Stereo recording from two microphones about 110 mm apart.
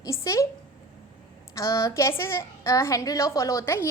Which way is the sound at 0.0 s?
25° left (ahead or behind).